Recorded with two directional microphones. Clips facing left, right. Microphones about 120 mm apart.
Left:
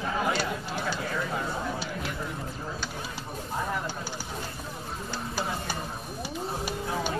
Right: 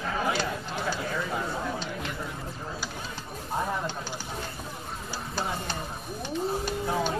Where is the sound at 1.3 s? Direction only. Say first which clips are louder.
Even; 5° left (ahead or behind).